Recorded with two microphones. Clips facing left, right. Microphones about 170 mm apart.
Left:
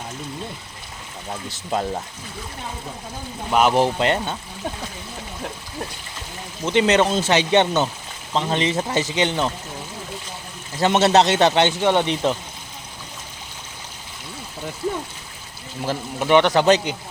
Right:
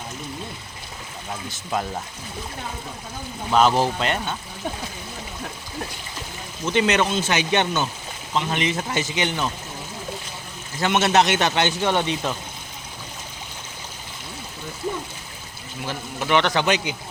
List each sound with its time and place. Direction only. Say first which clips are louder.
1.5 s speech: left 3 dB; 25° left (ahead or behind)
3.5 s a man's voice: even; 10° left (ahead or behind)
3.8 s speech: left 4 dB; 25° left (ahead or behind)
6.7 s speech: left 3 dB; 30° left (ahead or behind)
10.8 s speech: left 3 dB; 35° left (ahead or behind)
16.2 s a man's voice: left 5 dB; 15° left (ahead or behind)
16.6 s speech: left 6 dB; 35° left (ahead or behind)